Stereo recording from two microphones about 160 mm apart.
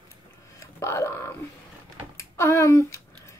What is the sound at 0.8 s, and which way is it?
Speech, 15° left (ahead or behind).